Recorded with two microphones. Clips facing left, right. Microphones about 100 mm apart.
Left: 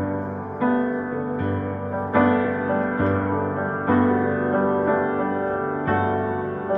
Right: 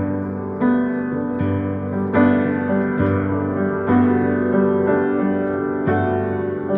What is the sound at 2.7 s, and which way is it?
Music, 25° left (ahead or behind).